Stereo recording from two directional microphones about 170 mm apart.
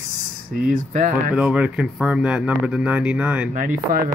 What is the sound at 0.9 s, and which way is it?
Speech, 45° right (ahead or behind).